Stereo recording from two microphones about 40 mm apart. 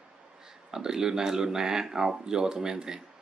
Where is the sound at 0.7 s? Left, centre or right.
Centre.